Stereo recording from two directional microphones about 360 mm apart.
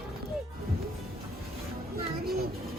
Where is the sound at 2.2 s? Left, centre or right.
Right.